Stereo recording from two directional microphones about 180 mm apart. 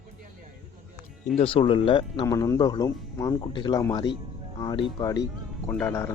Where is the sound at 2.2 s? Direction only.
20° left (ahead or behind).